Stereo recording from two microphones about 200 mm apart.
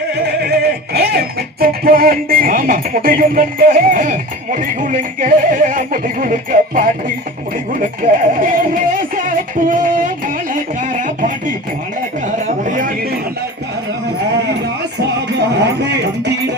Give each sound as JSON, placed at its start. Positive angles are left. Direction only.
{"t": 0.2, "sound": "music", "side_deg": -55}
{"t": 12.2, "sound": "a sound", "side_deg": -40}
{"t": 14.2, "sound": "music", "side_deg": -55}